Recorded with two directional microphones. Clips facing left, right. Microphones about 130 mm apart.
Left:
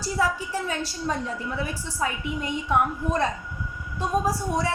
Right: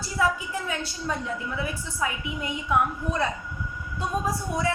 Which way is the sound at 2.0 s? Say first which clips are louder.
Left 2 dB; 35° left (ahead or behind).